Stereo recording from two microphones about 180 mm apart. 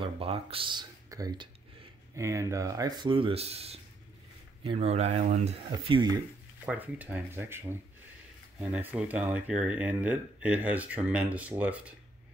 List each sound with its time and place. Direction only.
0.0 s speech: 30° right (ahead or behind)
5.7 s speech: 25° right (ahead or behind)
6.6 s speech: 10° right (ahead or behind)